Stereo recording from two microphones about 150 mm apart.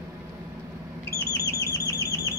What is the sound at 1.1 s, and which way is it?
Owl, 20° left (ahead or behind).